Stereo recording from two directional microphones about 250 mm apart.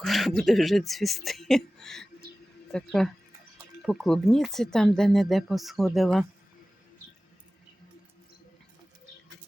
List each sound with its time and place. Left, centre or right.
0.0 s speech: centre